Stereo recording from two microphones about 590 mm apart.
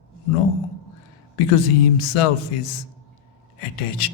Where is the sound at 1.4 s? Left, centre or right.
Left.